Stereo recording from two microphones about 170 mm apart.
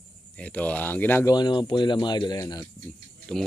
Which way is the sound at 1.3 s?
25° left (ahead or behind).